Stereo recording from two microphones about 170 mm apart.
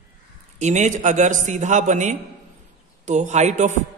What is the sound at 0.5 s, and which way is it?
A man's voice, 45° right (ahead or behind).